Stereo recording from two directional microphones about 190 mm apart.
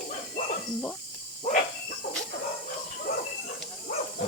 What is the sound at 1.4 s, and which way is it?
Dog, 45° left (ahead or behind).